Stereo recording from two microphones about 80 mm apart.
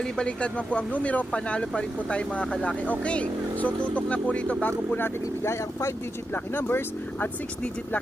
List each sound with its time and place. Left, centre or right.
0.0 s speech: centre
4.9 s speech: left